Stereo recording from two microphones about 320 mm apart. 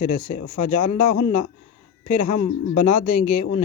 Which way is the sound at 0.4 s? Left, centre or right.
Left.